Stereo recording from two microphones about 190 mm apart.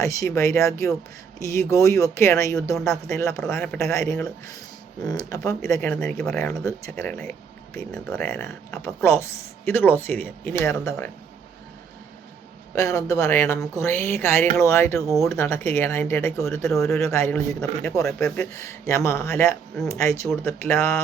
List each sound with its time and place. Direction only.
0.0 s speech: 15° left (ahead or behind)
12.7 s speech: 15° left (ahead or behind)
18.0 s a man's voice: 5° left (ahead or behind)
18.5 s speech: 15° left (ahead or behind)